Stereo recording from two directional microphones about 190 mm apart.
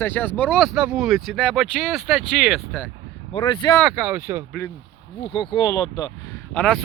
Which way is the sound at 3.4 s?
20° left (ahead or behind).